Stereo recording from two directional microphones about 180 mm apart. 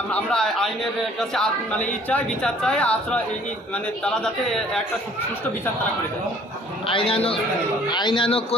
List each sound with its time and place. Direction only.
0.1 s speech: 5° left (ahead or behind)
6.8 s a man's voice: 30° left (ahead or behind)